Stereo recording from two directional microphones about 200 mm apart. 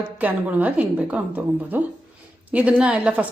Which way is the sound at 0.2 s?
10° right (ahead or behind).